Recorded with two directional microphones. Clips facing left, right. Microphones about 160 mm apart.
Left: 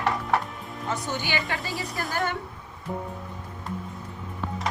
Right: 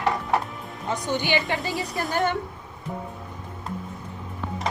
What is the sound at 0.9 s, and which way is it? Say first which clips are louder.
Speech: right 5 dB; 20° right (ahead or behind).